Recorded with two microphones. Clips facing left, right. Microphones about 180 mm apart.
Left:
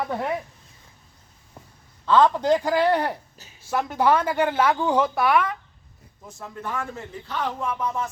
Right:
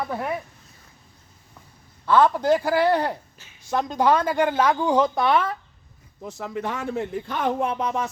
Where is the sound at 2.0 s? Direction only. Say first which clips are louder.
Even; 10° right (ahead or behind).